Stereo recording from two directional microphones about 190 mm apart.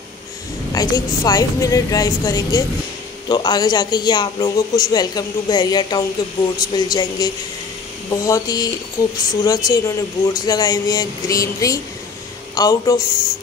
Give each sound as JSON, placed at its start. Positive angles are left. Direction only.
{"t": 0.7, "sound": "speech", "side_deg": 20}